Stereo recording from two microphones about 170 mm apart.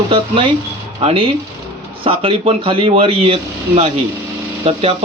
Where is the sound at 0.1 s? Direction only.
30° right (ahead or behind).